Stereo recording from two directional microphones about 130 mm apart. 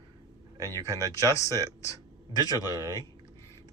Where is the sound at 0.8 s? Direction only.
25° left (ahead or behind).